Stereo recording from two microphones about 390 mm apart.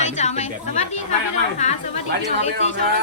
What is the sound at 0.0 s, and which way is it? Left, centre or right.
Chatter, centre.